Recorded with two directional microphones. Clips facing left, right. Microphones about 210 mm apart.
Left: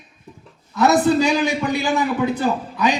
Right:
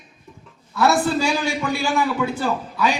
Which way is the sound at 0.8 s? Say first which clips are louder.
Left 3 dB; 20° left (ahead or behind).